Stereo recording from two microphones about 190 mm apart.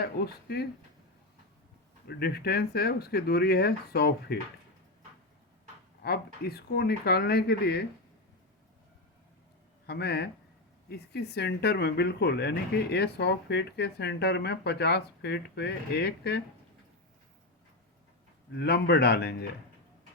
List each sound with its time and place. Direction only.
0.0 s speech: 60° left (ahead or behind)
2.0 s speech: 60° left (ahead or behind)
6.0 s speech: 55° left (ahead or behind)
9.8 s speech: 60° left (ahead or behind)
18.5 s speech: 60° left (ahead or behind)